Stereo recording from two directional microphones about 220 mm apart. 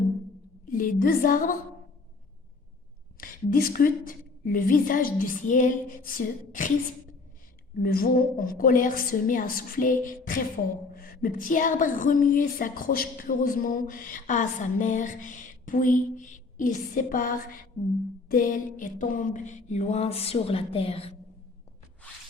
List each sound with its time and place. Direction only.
0.7 s a woman's voice: 40° left (ahead or behind)
3.2 s a woman's voice: 40° left (ahead or behind)
7.8 s a woman's voice: 40° left (ahead or behind)